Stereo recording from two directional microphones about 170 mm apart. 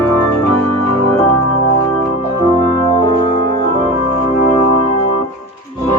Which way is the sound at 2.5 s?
25° left (ahead or behind).